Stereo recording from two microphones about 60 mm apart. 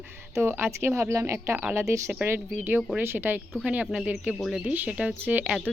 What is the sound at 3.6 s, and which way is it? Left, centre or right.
Speech, right.